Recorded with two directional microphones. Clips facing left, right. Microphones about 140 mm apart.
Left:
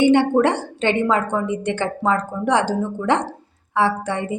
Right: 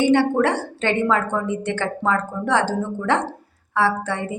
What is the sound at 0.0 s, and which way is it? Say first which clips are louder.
A woman's voice: left 2 dB; 20° left (ahead or behind).